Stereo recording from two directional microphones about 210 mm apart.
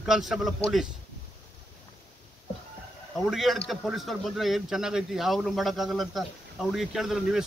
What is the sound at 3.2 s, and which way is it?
Speech, centre (ahead or behind).